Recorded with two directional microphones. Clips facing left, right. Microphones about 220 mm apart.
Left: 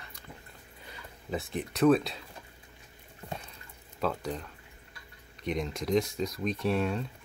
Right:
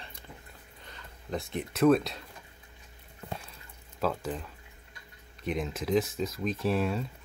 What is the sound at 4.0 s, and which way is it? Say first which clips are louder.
Speech: right 1 dB; centre (ahead or behind).